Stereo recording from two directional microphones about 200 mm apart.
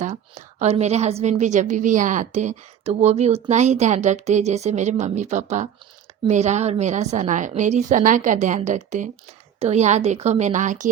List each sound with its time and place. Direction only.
0.0 s a woman's voice: 35° right (ahead or behind)